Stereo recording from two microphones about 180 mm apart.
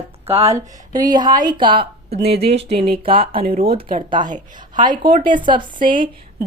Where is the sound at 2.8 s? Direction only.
55° right (ahead or behind).